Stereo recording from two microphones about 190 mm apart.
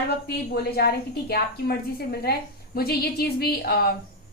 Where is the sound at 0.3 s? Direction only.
55° left (ahead or behind).